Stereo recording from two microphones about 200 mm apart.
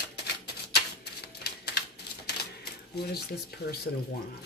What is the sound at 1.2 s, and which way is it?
Typewriter, 55° left (ahead or behind).